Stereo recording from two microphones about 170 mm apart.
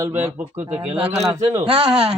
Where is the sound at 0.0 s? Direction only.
10° right (ahead or behind).